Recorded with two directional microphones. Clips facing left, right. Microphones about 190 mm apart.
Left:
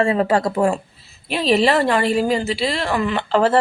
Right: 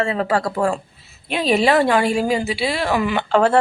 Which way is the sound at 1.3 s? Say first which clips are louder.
Even; centre (ahead or behind).